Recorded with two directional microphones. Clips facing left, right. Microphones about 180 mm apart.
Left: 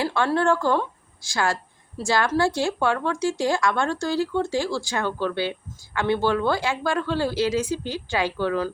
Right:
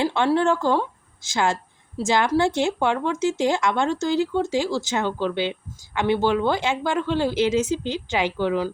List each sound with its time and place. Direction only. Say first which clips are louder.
0.0 s speech: right 2 dB; 20° right (ahead or behind)